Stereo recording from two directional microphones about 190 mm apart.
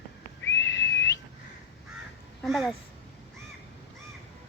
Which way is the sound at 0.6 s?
70° left (ahead or behind).